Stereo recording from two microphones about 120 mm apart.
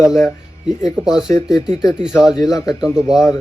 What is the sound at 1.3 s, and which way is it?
Speech, 20° left (ahead or behind).